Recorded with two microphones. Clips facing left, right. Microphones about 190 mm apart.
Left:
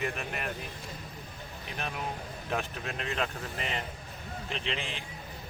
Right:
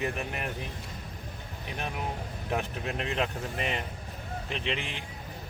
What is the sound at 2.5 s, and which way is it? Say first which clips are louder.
Speech: right 2 dB; 20° right (ahead or behind).